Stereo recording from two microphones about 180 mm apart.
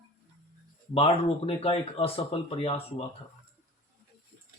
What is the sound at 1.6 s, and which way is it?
Speech, 35° left (ahead or behind).